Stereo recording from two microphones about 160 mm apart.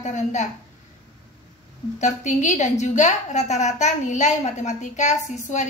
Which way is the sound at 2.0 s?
45° left (ahead or behind).